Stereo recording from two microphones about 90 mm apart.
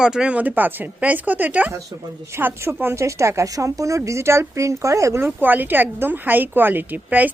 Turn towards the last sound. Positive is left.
turn(degrees=-20)  # may be behind; listen again after turning